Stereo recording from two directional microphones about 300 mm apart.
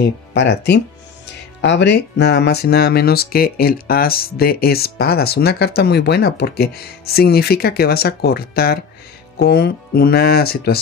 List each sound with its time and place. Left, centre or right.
0.0 s speech: left